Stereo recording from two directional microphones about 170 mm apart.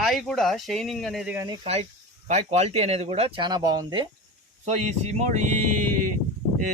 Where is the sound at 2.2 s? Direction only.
40° right (ahead or behind); by 4.0 s 25° right (ahead or behind).